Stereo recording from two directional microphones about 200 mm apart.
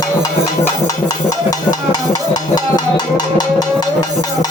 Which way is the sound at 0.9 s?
20° left (ahead or behind).